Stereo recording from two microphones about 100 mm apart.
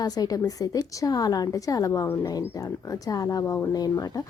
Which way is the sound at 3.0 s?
35° left (ahead or behind).